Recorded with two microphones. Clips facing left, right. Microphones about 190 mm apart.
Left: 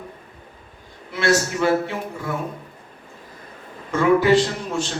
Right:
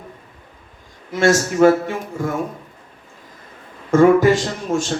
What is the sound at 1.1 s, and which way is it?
Speech, 45° right (ahead or behind).